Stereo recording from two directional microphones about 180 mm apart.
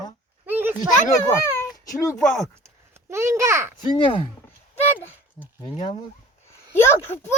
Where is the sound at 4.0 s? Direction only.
30° left (ahead or behind).